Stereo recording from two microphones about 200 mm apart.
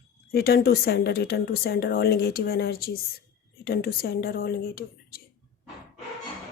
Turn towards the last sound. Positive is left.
turn(degrees=50)  # may be behind; listen again after turning